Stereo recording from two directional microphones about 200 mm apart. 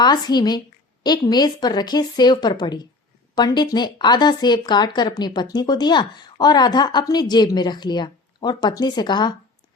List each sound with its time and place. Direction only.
0.0 s speech: 20° left (ahead or behind)